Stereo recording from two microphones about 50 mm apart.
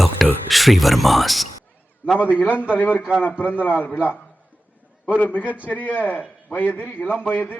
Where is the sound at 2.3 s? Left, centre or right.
Left.